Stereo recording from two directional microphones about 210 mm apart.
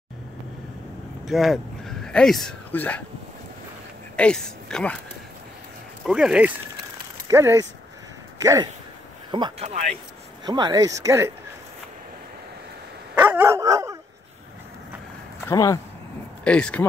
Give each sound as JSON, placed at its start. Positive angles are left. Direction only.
{"t": 1.2, "sound": "speech", "side_deg": 0}
{"t": 4.2, "sound": "speech", "side_deg": 5}
{"t": 6.0, "sound": "speech", "side_deg": -5}
{"t": 9.3, "sound": "speech", "side_deg": -25}
{"t": 10.4, "sound": "speech", "side_deg": -20}
{"t": 13.1, "sound": "dog", "side_deg": -10}
{"t": 15.4, "sound": "speech", "side_deg": 15}